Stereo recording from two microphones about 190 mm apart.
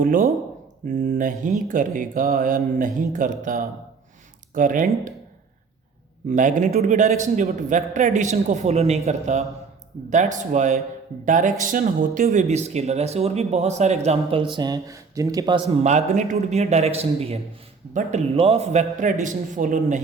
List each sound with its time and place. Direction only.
0.0 s speech: 45° right (ahead or behind)
6.2 s a man's voice: 40° right (ahead or behind)
14.5 s speech: 20° right (ahead or behind)
15.7 s a man's voice: 35° right (ahead or behind)